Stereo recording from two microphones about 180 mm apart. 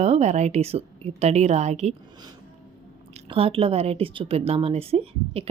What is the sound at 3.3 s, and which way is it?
A woman's voice, 30° right (ahead or behind).